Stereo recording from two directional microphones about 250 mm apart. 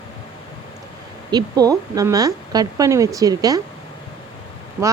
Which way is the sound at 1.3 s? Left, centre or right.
Centre.